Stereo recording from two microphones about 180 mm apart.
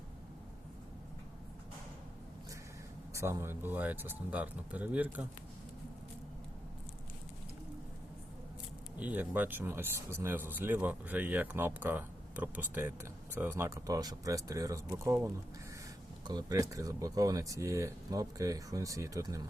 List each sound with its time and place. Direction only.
3.1 s speech: 15° right (ahead or behind)
9.0 s speech: 10° right (ahead or behind)